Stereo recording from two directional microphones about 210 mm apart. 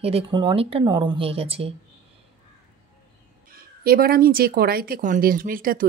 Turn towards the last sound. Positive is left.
turn(degrees=-40)  # may be behind; listen again after turning